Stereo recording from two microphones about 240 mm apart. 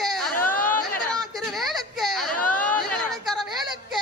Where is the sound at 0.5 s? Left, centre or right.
Left.